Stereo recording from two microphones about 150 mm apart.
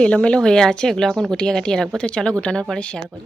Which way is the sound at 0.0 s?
5° left (ahead or behind).